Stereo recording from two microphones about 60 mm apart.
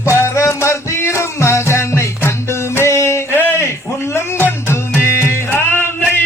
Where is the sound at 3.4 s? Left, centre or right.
Left.